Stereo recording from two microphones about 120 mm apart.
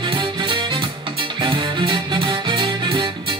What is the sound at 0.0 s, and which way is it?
Music, 40° right (ahead or behind).